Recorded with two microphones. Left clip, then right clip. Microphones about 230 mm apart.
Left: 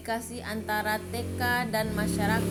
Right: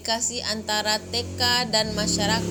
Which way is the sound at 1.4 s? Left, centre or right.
Right.